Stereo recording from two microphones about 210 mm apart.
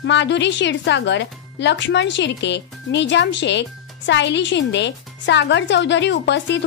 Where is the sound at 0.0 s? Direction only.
60° left (ahead or behind).